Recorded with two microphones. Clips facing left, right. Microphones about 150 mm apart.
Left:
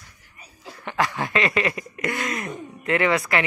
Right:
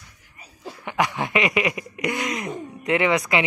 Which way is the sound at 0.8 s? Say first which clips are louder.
Right 1 dB; 15° right (ahead or behind).